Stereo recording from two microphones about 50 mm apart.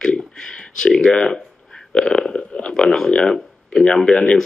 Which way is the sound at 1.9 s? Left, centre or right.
Centre.